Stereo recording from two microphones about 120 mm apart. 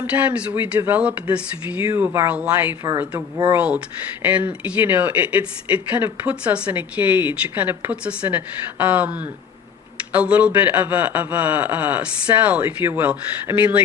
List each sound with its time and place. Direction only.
0.1 s speech: 10° right (ahead or behind)
1.9 s speech: 20° right (ahead or behind)